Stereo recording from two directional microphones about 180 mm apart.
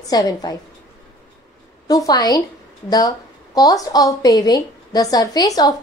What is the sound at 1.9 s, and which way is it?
A woman's voice, 20° left (ahead or behind).